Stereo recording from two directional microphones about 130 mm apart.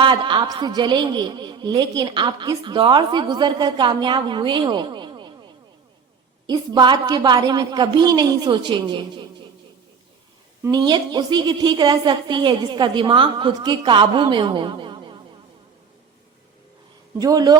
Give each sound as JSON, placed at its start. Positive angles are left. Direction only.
{"t": 0.0, "sound": "a woman's voice", "side_deg": -35}
{"t": 6.5, "sound": "a woman's voice", "side_deg": -35}
{"t": 10.7, "sound": "a woman's voice", "side_deg": -35}
{"t": 17.2, "sound": "speech", "side_deg": -25}